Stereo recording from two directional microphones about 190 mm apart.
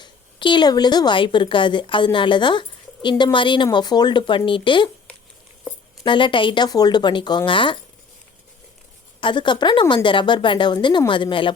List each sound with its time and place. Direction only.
0.0 s a woman's voice: 25° left (ahead or behind)
6.0 s a woman's voice: 25° left (ahead or behind)
9.2 s a woman's voice: 25° left (ahead or behind)